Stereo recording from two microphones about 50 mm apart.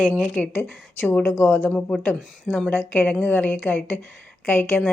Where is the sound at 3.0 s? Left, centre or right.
Left.